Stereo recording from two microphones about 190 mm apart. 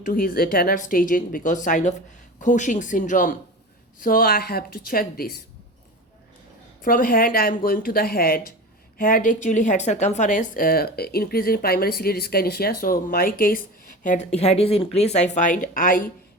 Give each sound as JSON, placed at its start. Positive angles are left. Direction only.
{"t": 0.0, "sound": "a woman's voice", "side_deg": 50}
{"t": 6.8, "sound": "a woman's voice", "side_deg": 50}